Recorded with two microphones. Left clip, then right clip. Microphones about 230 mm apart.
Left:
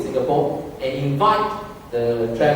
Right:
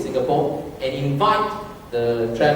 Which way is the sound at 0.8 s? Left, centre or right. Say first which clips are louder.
Left 1 dB; centre.